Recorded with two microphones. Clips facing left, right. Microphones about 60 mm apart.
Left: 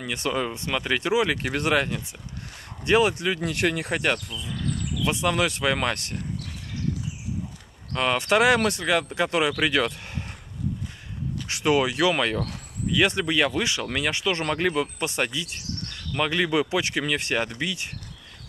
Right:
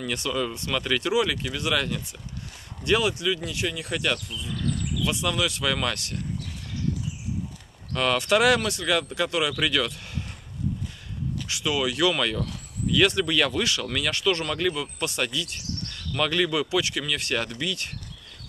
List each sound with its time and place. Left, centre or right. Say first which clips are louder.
0.2 s speech: left 1 dB; left
1.4 s speech: left 3 dB; left
3.3 s speech: left 5 dB; left
7.9 s speech: even; left
11.4 s speech: left 5 dB; left
11.9 s speech: left 1 dB; left
14.4 s speech: left 3 dB; left